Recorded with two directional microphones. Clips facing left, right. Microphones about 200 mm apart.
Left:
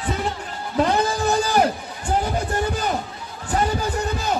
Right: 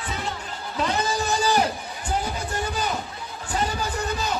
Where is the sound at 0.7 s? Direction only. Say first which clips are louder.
Left 5 dB; 55° left (ahead or behind).